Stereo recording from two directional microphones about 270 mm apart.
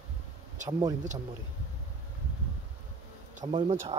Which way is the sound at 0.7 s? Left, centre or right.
Centre.